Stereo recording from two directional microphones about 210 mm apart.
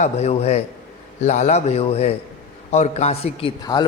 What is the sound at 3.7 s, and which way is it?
Speech, 15° left (ahead or behind).